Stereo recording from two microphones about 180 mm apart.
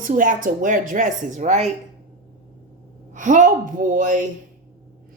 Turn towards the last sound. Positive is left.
turn(degrees=-45)  # may be behind; listen again after turning